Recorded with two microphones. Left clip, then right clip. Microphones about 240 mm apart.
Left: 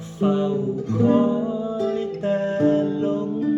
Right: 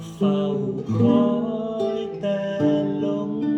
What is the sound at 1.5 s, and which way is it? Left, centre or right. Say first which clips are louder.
Music: even; centre.